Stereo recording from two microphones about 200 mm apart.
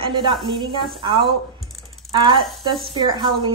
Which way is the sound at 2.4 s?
Centre (ahead or behind).